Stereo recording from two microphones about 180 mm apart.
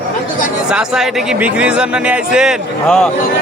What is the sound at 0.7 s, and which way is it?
Speech, 5° right (ahead or behind).